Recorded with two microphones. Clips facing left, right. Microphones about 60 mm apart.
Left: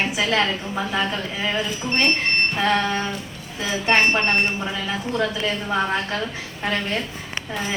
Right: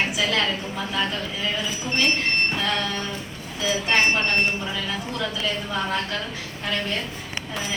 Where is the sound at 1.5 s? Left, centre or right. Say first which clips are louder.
Left 4 dB; left.